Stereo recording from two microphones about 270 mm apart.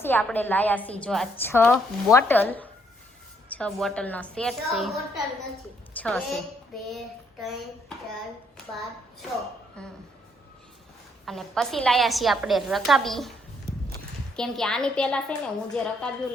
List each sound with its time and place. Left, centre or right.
0.0 s a woman's voice: centre
6.0 s a woman's voice: centre
7.4 s a woman's voice: centre
9.8 s a woman's voice: centre
11.3 s a woman's voice: centre
14.3 s a woman's voice: centre